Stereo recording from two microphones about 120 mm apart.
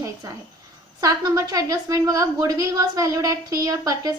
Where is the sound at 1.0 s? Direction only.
30° right (ahead or behind).